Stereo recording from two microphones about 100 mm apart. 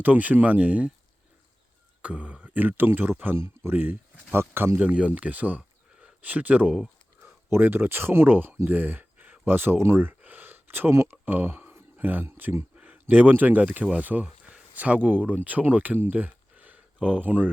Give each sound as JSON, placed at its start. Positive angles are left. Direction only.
{"t": 0.0, "sound": "speech", "side_deg": -15}
{"t": 2.0, "sound": "speech", "side_deg": -15}
{"t": 7.2, "sound": "speech", "side_deg": -25}